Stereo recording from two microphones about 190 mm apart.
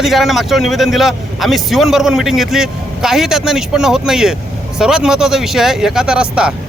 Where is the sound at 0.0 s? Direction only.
Centre (ahead or behind).